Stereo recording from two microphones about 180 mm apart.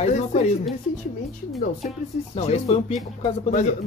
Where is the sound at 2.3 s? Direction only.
35° left (ahead or behind).